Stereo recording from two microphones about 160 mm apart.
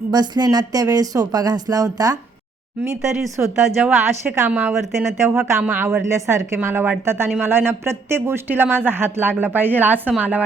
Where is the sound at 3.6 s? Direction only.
5° right (ahead or behind).